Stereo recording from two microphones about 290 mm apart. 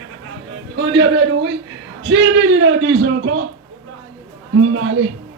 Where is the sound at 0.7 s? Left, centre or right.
Right.